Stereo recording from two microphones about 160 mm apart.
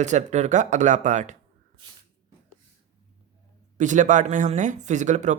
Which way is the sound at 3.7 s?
50° right (ahead or behind).